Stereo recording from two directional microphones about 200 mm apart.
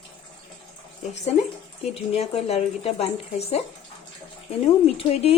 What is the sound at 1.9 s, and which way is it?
Speech, 30° left (ahead or behind).